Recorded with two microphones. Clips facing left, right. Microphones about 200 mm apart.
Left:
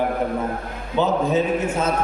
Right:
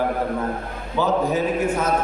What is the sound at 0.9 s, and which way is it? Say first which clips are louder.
Speech: left 1 dB; 25° left (ahead or behind).